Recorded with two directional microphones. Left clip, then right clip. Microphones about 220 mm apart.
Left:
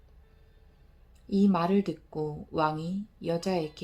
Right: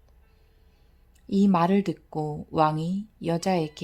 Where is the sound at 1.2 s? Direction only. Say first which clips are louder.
Right 4 dB; 50° right (ahead or behind).